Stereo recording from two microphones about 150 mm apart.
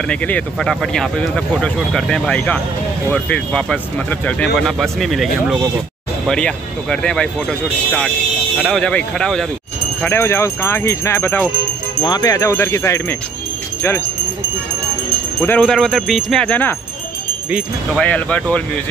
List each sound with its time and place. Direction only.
0.1 s speech: 10° left (ahead or behind)
8.5 s speech: 5° right (ahead or behind)
8.8 s speech: 5° left (ahead or behind)
10.0 s speech: 15° left (ahead or behind)
12.0 s speech: 25° left (ahead or behind)
15.4 s speech: 10° left (ahead or behind)
17.9 s speech: 10° left (ahead or behind)